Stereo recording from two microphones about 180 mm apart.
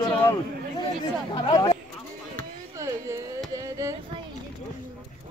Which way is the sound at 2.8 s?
15° right (ahead or behind).